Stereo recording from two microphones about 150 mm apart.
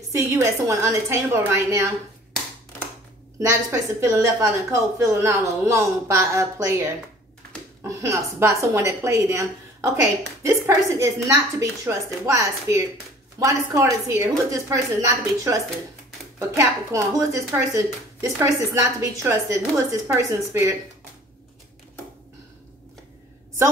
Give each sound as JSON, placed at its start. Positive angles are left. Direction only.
{"t": 0.1, "sound": "speech", "side_deg": -20}
{"t": 3.3, "sound": "speech", "side_deg": -20}